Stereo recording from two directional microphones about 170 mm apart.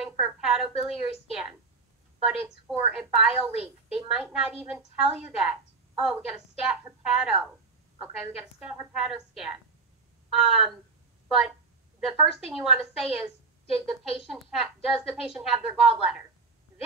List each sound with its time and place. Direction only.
0.0 s a woman's voice: 5° right (ahead or behind)
1.2 s a sound: 5° right (ahead or behind)
2.9 s a woman's voice: 5° right (ahead or behind)